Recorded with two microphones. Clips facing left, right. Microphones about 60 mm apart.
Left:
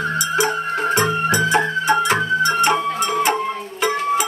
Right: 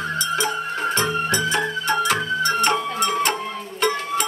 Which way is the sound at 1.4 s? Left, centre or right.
Left.